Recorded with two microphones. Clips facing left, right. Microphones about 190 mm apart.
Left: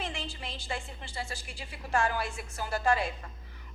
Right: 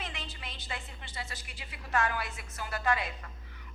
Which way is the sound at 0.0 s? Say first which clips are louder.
Left 5 dB; 30° left (ahead or behind).